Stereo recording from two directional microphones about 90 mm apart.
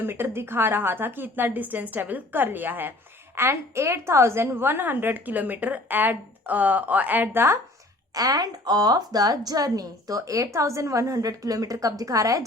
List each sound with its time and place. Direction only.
0.0 s a woman's voice: 25° right (ahead or behind)
8.1 s a woman's voice: 45° right (ahead or behind)